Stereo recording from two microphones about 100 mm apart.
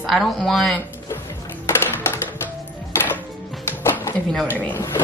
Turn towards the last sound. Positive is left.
turn(degrees=15)  # may be behind; listen again after turning